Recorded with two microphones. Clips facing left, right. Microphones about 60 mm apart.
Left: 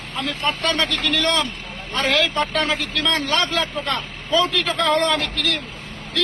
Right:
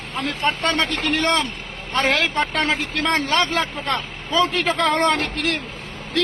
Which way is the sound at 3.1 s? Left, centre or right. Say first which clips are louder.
Right 2 dB; right.